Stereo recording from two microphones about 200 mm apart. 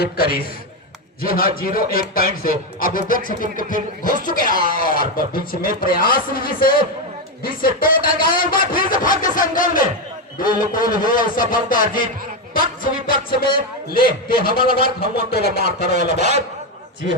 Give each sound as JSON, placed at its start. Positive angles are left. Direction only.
{"t": 0.0, "sound": "speech", "side_deg": 50}